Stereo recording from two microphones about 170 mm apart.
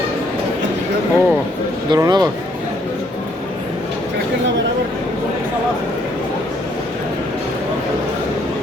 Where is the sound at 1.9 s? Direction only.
20° right (ahead or behind).